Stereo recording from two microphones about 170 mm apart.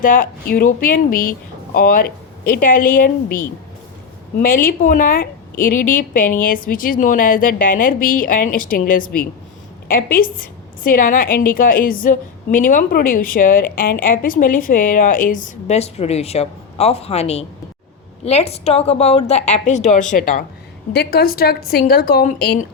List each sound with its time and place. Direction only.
0.0 s a woman's voice: 55° left (ahead or behind)
20.9 s a woman's voice: 70° left (ahead or behind)